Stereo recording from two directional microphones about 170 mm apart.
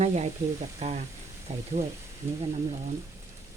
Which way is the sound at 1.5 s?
35° right (ahead or behind).